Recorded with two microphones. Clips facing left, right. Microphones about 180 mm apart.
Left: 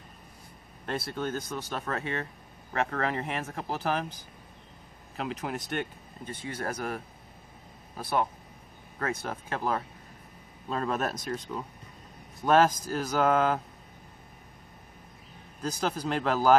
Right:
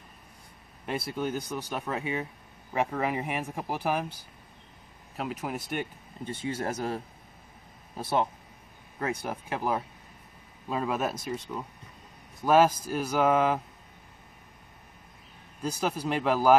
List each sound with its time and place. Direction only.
0.8 s speech: 10° right (ahead or behind)
5.1 s speech: 5° right (ahead or behind)
6.2 s speech: 25° right (ahead or behind)
8.0 s speech: 25° right (ahead or behind)
9.0 s speech: 15° right (ahead or behind)
15.6 s speech: 10° right (ahead or behind)